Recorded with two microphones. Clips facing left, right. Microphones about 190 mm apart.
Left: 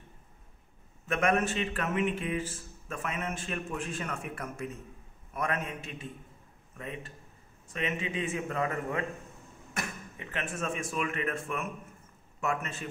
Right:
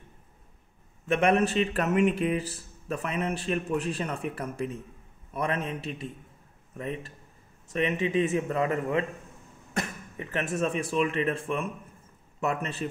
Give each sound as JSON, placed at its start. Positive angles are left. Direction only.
{"t": 1.0, "sound": "speech", "side_deg": -30}
{"t": 10.1, "sound": "speech", "side_deg": -40}